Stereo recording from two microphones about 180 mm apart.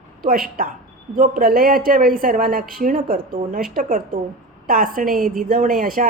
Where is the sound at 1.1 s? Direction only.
50° right (ahead or behind).